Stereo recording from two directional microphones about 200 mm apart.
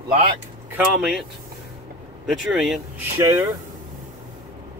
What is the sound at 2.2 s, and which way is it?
Speech, centre (ahead or behind).